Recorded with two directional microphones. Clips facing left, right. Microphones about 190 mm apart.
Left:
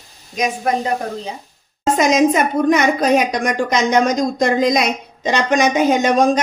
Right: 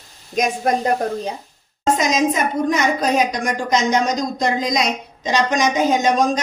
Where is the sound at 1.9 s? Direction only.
60° left (ahead or behind).